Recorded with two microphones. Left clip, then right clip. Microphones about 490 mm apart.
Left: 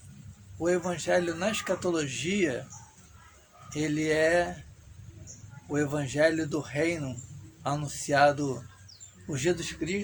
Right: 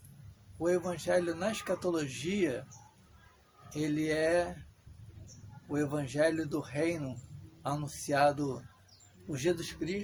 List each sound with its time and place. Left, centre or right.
0.6 s speech: right
3.7 s speech: right
5.7 s speech: right